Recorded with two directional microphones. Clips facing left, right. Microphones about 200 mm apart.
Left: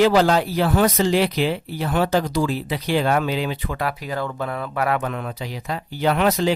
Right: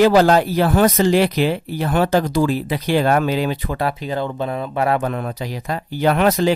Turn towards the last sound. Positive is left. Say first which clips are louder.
# right 3 dB
turn(degrees=-50)  # may be behind; listen again after turning